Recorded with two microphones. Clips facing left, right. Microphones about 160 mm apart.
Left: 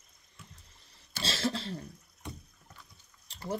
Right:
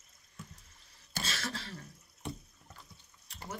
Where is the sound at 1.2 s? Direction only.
30° left (ahead or behind).